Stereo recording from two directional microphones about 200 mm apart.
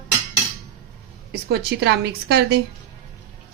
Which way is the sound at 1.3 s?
55° right (ahead or behind).